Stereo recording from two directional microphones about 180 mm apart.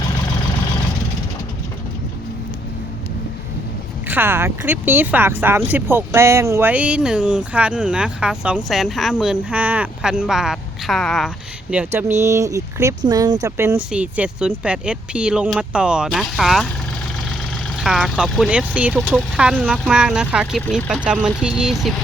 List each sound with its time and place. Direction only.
4.1 s speech: 10° right (ahead or behind)
17.7 s speech: 5° right (ahead or behind)